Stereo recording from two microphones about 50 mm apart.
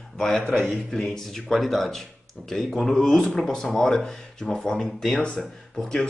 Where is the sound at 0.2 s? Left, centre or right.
Centre.